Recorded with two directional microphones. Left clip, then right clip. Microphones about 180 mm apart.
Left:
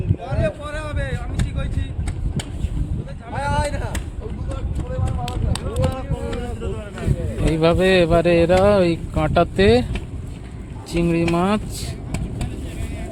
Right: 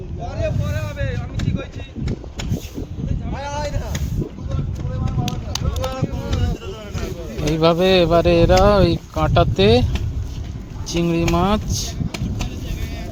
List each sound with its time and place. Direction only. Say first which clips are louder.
0.3 s vehicle: left 1 dB; 50° left (ahead or behind)
3.2 s a sound: left 4 dB; 55° left (ahead or behind)
5.2 s run: right 1 dB; centre (ahead or behind)
5.9 s music: right 1 dB; 40° right (ahead or behind)
7.5 s speech: right 1 dB; 10° right (ahead or behind)
10.9 s speech: even; 5° right (ahead or behind)